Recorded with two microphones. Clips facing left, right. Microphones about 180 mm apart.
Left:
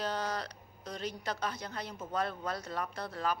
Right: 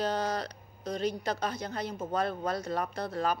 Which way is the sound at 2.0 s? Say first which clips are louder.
Right 3 dB; 45° right (ahead or behind).